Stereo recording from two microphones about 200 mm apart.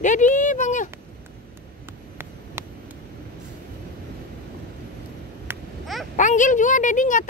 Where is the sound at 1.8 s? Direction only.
10° right (ahead or behind).